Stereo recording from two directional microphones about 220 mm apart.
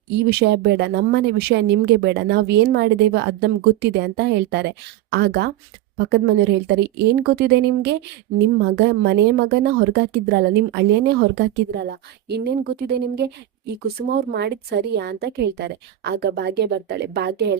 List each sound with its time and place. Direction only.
0.3 s a woman's voice: 50° right (ahead or behind)